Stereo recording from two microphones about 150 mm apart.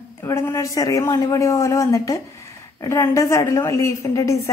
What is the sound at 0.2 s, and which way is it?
A man's voice, 20° left (ahead or behind).